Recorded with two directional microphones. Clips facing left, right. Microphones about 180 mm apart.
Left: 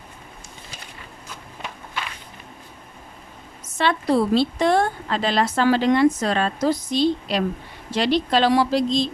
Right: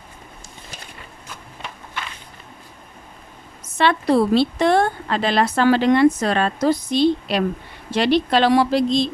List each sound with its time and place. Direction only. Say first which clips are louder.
3.8 s a woman's voice: right 3 dB; 65° right (ahead or behind)